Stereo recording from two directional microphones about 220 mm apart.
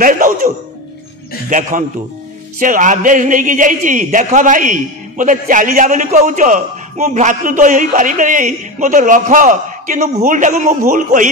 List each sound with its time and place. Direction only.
0.0 s music: 35° right (ahead or behind)
1.5 s a man's voice: 35° right (ahead or behind)